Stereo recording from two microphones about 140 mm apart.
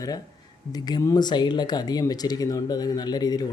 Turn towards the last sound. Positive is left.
turn(degrees=30)  # may be behind; listen again after turning